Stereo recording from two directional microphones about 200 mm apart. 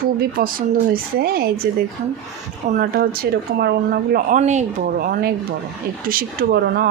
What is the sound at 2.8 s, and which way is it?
Speech, 50° right (ahead or behind).